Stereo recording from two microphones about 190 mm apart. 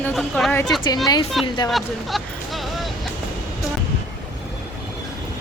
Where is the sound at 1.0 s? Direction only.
20° left (ahead or behind).